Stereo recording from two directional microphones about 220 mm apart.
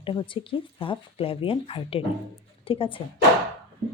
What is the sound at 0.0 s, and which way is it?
Speech, 25° left (ahead or behind).